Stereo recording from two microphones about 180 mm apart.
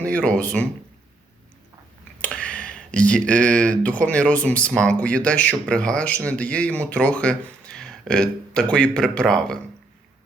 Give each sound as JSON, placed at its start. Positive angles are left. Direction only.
{"t": 0.0, "sound": "speech", "side_deg": 5}
{"t": 2.2, "sound": "speech", "side_deg": 5}